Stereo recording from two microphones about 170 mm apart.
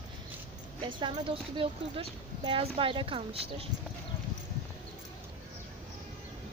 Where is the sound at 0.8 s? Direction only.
30° right (ahead or behind).